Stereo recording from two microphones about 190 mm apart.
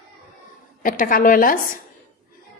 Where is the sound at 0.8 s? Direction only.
45° left (ahead or behind).